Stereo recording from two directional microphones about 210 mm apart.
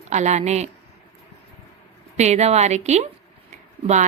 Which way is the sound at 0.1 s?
35° right (ahead or behind).